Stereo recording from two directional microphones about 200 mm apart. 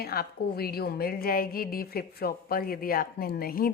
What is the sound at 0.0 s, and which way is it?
A woman's voice, 50° left (ahead or behind).